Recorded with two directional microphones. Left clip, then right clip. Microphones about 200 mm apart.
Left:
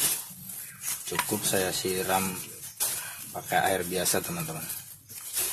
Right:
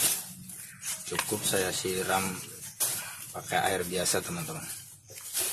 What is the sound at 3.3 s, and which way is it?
Speech, 20° left (ahead or behind).